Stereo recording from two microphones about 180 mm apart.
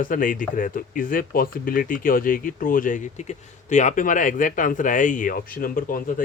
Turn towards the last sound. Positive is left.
turn(degrees=50)  # may be behind; listen again after turning